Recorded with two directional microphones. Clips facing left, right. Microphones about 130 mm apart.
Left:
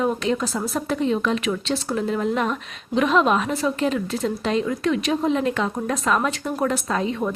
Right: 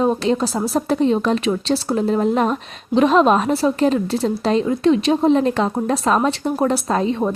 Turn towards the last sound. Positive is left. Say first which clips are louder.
# right 5 dB
turn(degrees=-30)  # may be behind; listen again after turning